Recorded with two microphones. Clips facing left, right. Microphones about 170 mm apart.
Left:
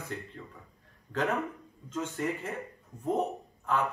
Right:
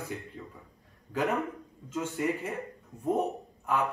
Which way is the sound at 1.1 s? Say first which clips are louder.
Right 1 dB; 10° right (ahead or behind).